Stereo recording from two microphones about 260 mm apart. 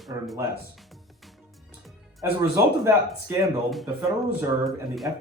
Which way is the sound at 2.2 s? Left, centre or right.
Centre.